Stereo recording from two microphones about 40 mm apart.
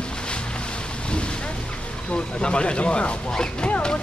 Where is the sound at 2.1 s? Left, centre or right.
Left.